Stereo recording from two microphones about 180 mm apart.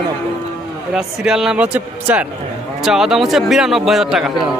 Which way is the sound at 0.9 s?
5° right (ahead or behind).